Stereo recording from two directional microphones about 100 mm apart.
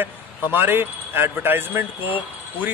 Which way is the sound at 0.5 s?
20° right (ahead or behind).